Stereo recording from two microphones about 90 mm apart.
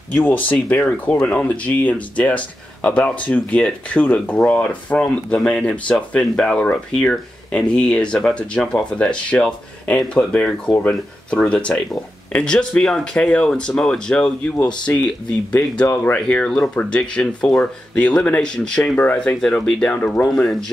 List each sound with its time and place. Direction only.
0.1 s speech: 20° left (ahead or behind)
14.9 s speech: 25° left (ahead or behind)
16.2 s speech: 10° left (ahead or behind)